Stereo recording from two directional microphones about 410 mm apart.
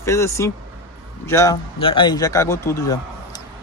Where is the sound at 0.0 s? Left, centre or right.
Centre.